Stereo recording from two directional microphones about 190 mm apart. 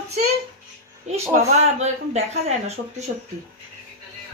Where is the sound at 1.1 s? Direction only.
15° right (ahead or behind).